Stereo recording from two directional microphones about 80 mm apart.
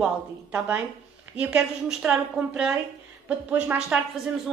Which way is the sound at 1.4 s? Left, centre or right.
Centre.